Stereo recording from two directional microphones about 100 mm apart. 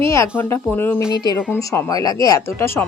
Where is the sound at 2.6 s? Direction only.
25° left (ahead or behind).